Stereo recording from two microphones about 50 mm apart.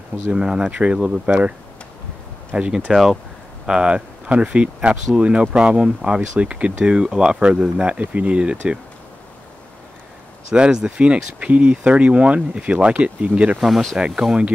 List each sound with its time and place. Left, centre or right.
0.3 s speech: centre
2.5 s speech: right
2.9 s speech: centre
3.6 s speech: centre
10.5 s speech: centre
13.6 s speech: centre
13.9 s speech: centre